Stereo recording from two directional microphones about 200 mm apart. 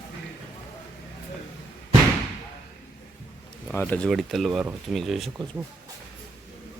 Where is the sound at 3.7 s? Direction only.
10° left (ahead or behind).